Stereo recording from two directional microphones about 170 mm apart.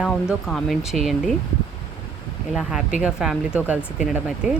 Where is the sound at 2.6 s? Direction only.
5° right (ahead or behind).